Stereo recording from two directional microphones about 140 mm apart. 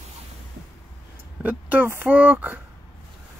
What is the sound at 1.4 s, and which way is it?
Speech, 10° right (ahead or behind).